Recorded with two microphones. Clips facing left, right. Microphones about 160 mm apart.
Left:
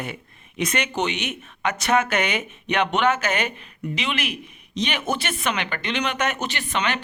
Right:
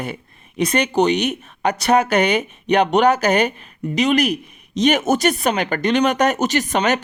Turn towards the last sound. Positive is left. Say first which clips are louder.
# right 8 dB
turn(degrees=-40)  # may be behind; listen again after turning